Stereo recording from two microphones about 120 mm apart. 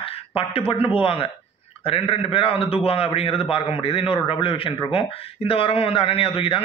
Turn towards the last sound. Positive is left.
turn(degrees=50)  # may be behind; listen again after turning